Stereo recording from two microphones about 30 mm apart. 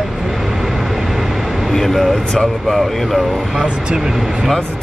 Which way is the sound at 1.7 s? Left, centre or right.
Centre.